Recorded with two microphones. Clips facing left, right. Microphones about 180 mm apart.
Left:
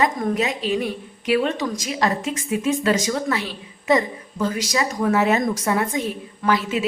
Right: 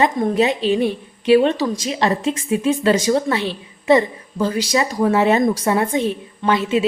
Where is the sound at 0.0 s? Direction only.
25° right (ahead or behind).